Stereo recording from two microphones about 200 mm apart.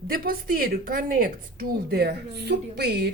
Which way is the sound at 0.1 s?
45° right (ahead or behind).